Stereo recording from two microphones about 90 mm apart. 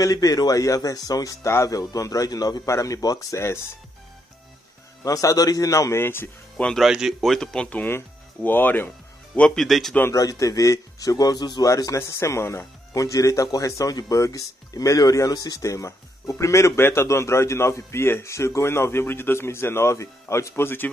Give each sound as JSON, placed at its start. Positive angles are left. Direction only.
{"t": 0.0, "sound": "speech", "side_deg": 40}
{"t": 5.0, "sound": "speech", "side_deg": 40}
{"t": 6.5, "sound": "speech", "side_deg": 5}
{"t": 9.3, "sound": "speech", "side_deg": 5}
{"t": 10.1, "sound": "a man's voice", "side_deg": 40}
{"t": 11.6, "sound": "speech", "side_deg": 35}